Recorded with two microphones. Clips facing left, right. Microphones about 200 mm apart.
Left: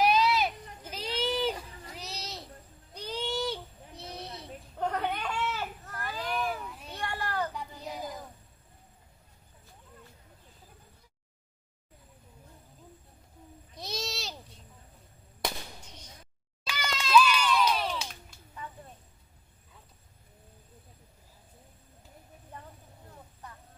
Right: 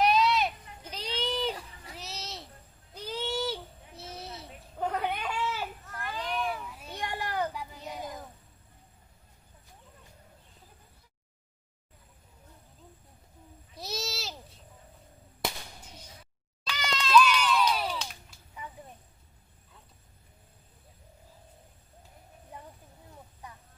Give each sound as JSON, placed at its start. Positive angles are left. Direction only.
{"t": 0.0, "sound": "a sound", "side_deg": 0}
{"t": 5.9, "sound": "children playing", "side_deg": 40}
{"t": 6.7, "sound": "children playing", "side_deg": -5}
{"t": 7.0, "sound": "a sound", "side_deg": -15}
{"t": 7.5, "sound": "child singing", "side_deg": 0}
{"t": 13.7, "sound": "owl", "side_deg": -5}
{"t": 15.4, "sound": "firecracker", "side_deg": -10}
{"t": 16.6, "sound": "crowd", "side_deg": 10}
{"t": 17.6, "sound": "a sound", "side_deg": -5}